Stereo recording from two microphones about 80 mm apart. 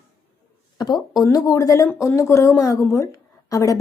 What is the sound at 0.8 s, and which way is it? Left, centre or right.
A woman's voice, left.